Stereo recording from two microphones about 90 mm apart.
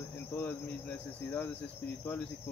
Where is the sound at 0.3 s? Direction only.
20° left (ahead or behind).